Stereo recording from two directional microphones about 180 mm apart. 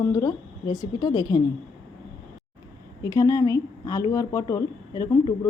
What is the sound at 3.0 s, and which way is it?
A woman's voice, 20° left (ahead or behind).